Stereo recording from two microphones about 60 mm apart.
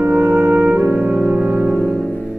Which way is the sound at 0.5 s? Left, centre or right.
Right.